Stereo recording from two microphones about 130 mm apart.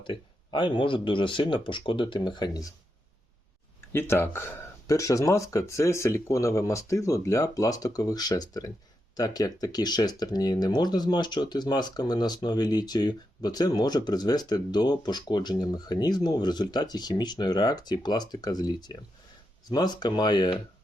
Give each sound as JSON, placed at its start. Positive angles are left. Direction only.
{"t": 0.1, "sound": "speech", "side_deg": 40}
{"t": 3.9, "sound": "speech", "side_deg": 15}